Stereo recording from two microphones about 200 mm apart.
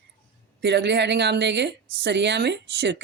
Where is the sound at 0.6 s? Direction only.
60° right (ahead or behind).